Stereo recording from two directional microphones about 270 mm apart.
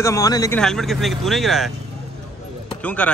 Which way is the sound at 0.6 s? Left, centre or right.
Centre.